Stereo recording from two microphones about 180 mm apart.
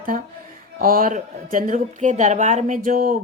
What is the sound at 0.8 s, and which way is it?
Speech, 50° right (ahead or behind).